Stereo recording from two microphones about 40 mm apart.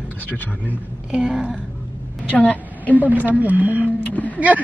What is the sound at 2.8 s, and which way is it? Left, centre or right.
Speech, left.